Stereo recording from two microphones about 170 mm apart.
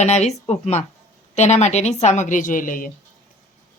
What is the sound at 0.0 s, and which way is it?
A woman's voice, 40° left (ahead or behind).